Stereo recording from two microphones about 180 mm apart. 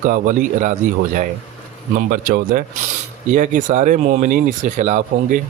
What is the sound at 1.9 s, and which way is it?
Speech, 50° right (ahead or behind).